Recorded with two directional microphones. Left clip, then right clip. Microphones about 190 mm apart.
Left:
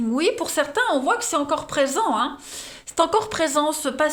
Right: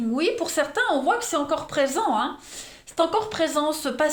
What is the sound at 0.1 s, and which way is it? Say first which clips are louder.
A woman's voice: left 2 dB; 35° left (ahead or behind).